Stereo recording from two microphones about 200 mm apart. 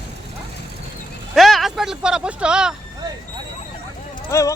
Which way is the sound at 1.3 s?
Centre (ahead or behind).